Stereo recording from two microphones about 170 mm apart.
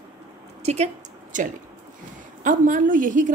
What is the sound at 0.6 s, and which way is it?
Speech, 40° right (ahead or behind).